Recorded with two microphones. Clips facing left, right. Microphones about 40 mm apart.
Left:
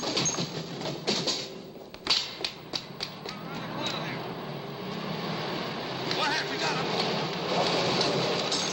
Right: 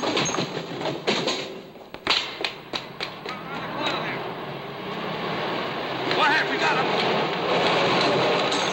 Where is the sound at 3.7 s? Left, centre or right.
Right.